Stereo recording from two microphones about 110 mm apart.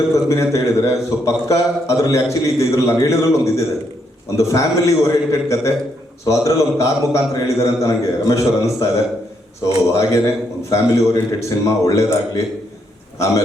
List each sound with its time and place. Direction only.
0.3 s a man's voice: 30° left (ahead or behind)